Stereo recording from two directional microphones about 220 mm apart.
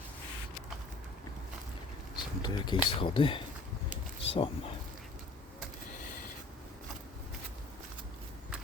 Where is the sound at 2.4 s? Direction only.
20° left (ahead or behind).